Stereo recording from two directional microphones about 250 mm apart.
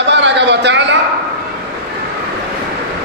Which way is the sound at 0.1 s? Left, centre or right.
Right.